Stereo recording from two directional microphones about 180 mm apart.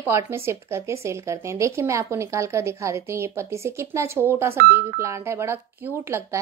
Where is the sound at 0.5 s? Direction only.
15° right (ahead or behind).